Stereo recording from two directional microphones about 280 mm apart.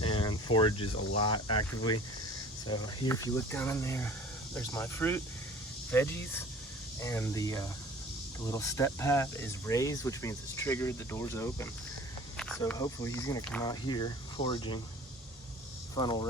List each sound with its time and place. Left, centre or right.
0.0 s a sound: centre
0.5 s speech: centre
1.5 s speech: left
2.6 s speech: centre
16.0 s speech: centre